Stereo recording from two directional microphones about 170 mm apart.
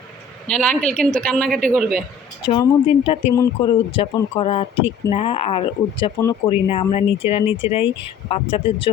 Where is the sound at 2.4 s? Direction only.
30° left (ahead or behind).